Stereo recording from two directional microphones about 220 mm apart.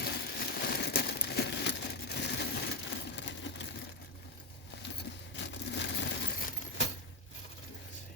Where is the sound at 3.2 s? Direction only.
55° left (ahead or behind).